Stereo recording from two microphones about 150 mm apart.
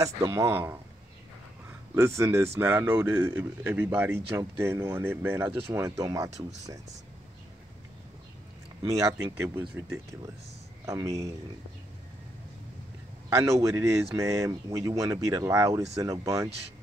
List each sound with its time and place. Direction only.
0.0 s speech: 20° right (ahead or behind)
5.5 s speech: 35° right (ahead or behind)
5.8 s speech: 20° right (ahead or behind)
8.8 s speech: 20° right (ahead or behind)
13.3 s speech: 20° right (ahead or behind)